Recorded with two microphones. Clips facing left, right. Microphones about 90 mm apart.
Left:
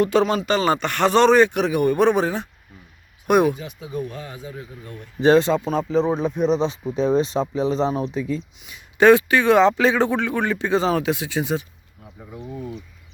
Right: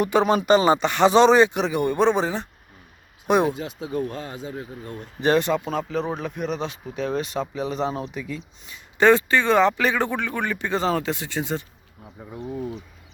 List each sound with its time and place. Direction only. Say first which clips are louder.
0.0 s speech: left 1 dB; 20° right (ahead or behind)
0.4 s speech: right 3 dB; 5° right (ahead or behind)
3.6 s speech: right 2 dB; 60° right (ahead or behind)
4.4 s a man's voice: right 2 dB; 40° right (ahead or behind)
5.2 s speech: left 5 dB; 20° left (ahead or behind)